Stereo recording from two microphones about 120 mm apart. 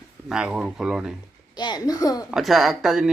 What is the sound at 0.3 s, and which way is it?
Speech, 5° right (ahead or behind).